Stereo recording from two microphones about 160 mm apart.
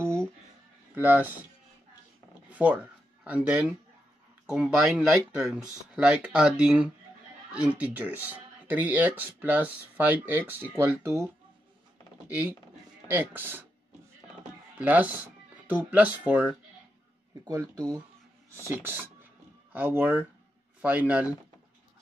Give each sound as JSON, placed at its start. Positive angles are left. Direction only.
{"t": 0.9, "sound": "speech", "side_deg": -10}
{"t": 2.5, "sound": "speech", "side_deg": -10}
{"t": 13.1, "sound": "speech", "side_deg": -10}
{"t": 14.8, "sound": "music", "side_deg": -10}
{"t": 15.9, "sound": "speech", "side_deg": -10}
{"t": 17.5, "sound": "speech", "side_deg": -25}
{"t": 18.8, "sound": "speech", "side_deg": -10}